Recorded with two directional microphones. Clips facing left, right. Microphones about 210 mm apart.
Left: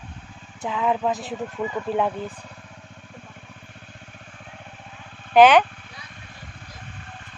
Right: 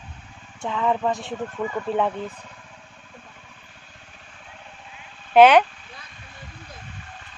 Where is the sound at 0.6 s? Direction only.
5° left (ahead or behind).